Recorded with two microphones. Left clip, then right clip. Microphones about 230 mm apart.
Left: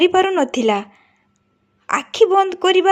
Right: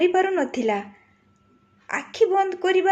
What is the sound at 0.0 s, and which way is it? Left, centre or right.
Speech, left.